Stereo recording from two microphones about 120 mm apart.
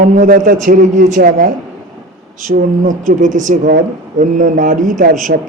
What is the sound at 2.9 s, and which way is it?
Speech, 90° right.